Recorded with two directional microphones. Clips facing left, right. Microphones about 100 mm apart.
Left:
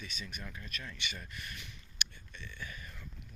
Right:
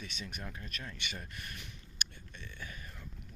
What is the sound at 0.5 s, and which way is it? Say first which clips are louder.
Speech: even; 45° right (ahead or behind).